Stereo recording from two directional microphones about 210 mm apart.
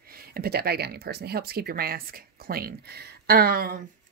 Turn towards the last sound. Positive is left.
turn(degrees=-45)  # may be behind; listen again after turning